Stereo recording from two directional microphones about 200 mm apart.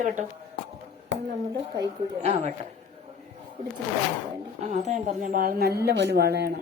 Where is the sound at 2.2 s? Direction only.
30° right (ahead or behind).